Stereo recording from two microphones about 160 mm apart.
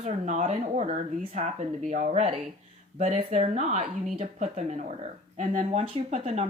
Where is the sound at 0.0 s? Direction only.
50° right (ahead or behind).